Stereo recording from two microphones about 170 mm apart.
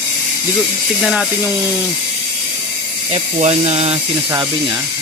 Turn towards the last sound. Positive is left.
turn(degrees=-40)  # may be behind; listen again after turning